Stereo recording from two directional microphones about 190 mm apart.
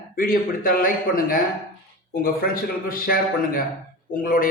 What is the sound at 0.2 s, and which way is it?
A man's voice, 50° left (ahead or behind).